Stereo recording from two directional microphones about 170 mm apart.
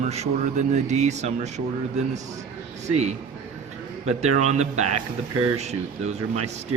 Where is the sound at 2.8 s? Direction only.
40° right (ahead or behind).